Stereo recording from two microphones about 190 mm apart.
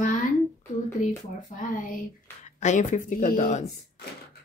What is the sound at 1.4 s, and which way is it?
A woman's voice, 40° left (ahead or behind).